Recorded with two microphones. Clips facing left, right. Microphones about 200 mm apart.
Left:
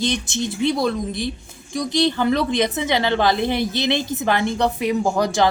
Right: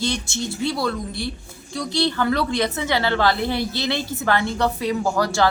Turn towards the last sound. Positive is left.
turn(degrees=20)  # may be behind; listen again after turning